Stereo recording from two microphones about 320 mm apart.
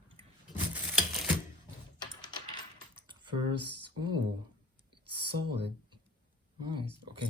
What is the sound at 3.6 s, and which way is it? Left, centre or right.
Speech, right.